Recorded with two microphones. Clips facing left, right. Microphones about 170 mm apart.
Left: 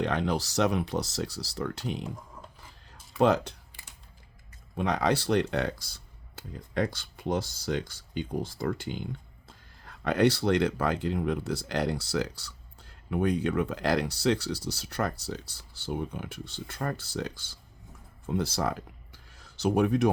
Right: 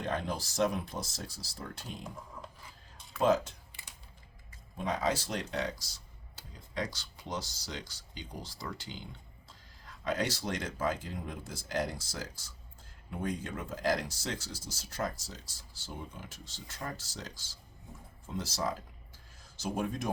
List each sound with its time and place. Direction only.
0.0 s speech: 75° left (ahead or behind)
3.2 s speech: 70° left (ahead or behind)
4.8 s speech: 75° left (ahead or behind)